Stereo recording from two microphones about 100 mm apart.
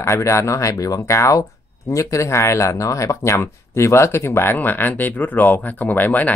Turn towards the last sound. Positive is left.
turn(degrees=15)  # may be behind; listen again after turning